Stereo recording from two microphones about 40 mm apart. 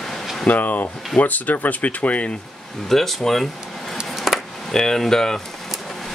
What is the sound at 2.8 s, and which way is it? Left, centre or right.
Speech, centre.